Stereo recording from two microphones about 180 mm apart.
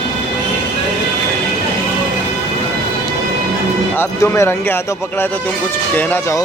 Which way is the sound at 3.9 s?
10° left (ahead or behind).